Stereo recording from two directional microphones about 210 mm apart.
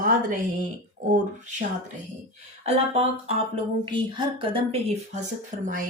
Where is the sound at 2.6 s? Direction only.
30° right (ahead or behind).